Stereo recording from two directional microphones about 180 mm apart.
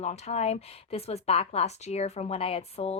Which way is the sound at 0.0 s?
40° left (ahead or behind).